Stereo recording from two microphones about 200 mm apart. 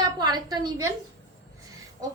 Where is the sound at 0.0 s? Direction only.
20° right (ahead or behind).